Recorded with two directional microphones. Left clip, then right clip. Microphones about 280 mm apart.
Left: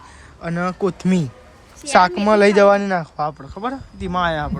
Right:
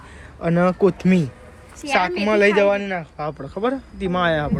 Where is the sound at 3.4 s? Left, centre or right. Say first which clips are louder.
Right 3 dB; centre.